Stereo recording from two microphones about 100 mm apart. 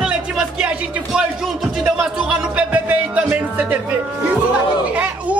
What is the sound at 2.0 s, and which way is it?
Speech, 10° right (ahead or behind).